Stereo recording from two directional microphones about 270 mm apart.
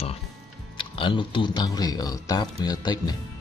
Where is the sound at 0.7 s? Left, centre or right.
Centre.